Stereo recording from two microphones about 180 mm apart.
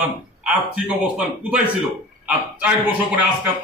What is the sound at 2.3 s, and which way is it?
Speech, 10° right (ahead or behind).